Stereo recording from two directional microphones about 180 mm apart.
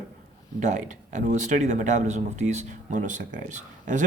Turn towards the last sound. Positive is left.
turn(degrees=-45)  # may be behind; listen again after turning